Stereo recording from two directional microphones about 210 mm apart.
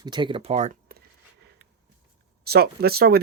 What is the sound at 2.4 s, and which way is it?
Speech, 50° right (ahead or behind).